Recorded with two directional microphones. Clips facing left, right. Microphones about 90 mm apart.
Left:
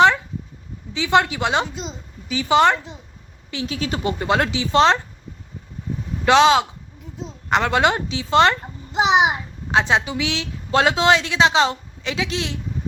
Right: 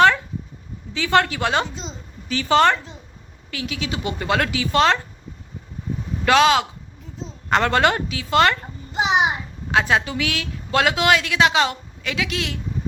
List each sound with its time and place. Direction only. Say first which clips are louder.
0.9 s a child's voice: left 1 dB; 20° left (ahead or behind)
3.8 s speech: left 4 dB; 40° left (ahead or behind)
4.2 s a woman's voice: even; 25° left (ahead or behind)
6.2 s a woman's voice: left 2 dB; 25° left (ahead or behind)
7.2 s a woman's voice: even; 15° left (ahead or behind)